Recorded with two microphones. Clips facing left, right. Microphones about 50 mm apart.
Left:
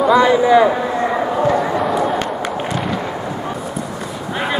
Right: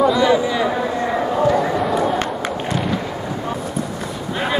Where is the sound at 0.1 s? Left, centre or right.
Left.